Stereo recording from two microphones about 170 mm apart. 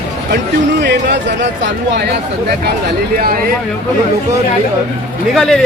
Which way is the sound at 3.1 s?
60° right (ahead or behind).